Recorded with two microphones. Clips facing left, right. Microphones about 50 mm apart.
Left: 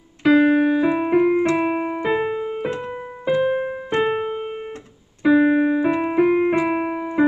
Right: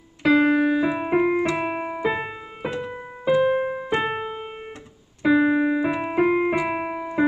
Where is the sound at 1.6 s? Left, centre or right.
Centre.